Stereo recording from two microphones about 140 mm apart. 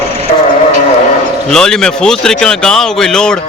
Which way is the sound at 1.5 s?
5° left (ahead or behind).